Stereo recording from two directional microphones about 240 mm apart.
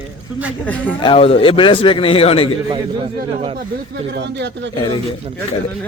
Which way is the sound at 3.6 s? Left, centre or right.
Right.